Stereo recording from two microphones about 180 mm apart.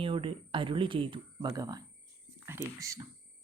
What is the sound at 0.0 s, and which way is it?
Speech, 30° right (ahead or behind).